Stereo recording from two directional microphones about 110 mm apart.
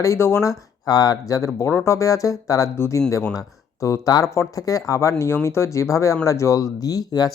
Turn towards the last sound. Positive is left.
turn(degrees=35)  # may be behind; listen again after turning